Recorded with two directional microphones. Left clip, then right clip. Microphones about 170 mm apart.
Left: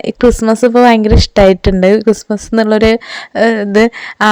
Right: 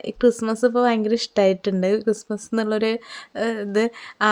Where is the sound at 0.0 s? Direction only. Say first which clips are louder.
Left 9 dB; 40° left (ahead or behind).